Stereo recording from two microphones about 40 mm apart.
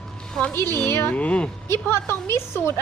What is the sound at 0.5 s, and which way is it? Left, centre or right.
Speech, left.